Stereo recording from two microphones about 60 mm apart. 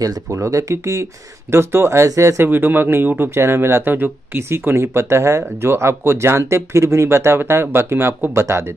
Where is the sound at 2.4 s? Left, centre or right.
Right.